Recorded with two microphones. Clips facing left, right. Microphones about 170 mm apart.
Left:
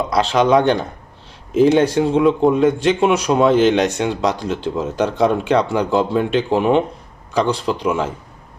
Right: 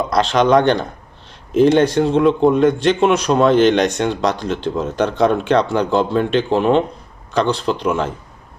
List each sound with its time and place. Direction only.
0.1 s a man's voice: 5° left (ahead or behind)